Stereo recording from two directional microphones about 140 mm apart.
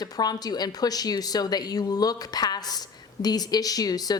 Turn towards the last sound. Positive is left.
turn(degrees=30)  # may be behind; listen again after turning